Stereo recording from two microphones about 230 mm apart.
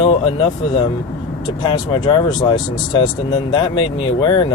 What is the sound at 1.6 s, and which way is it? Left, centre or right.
Speech, centre.